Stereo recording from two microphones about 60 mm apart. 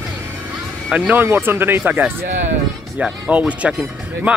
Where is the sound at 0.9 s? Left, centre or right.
Centre.